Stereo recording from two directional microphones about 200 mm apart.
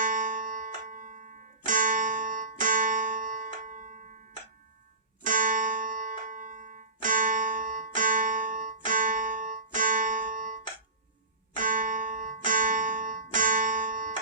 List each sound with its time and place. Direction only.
0.0 s music: 40° right (ahead or behind)
5.2 s music: 40° right (ahead or behind)